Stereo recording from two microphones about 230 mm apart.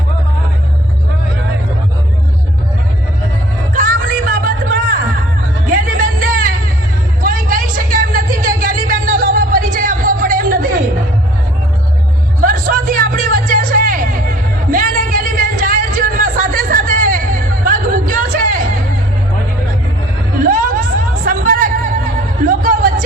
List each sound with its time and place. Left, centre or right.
3.8 s music: right
5.7 s music: right
7.2 s a sound: right
12.4 s music: right
14.7 s a sound: right
20.4 s music: right